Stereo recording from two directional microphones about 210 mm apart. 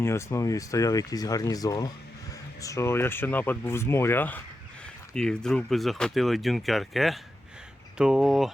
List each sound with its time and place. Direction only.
0.0 s speech: 15° left (ahead or behind)